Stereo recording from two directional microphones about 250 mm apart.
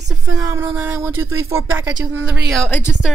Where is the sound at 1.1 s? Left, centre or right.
Right.